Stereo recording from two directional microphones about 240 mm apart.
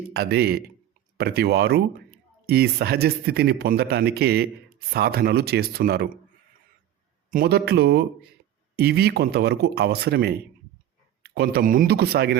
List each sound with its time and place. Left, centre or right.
0.1 s speech: right
7.3 s speech: right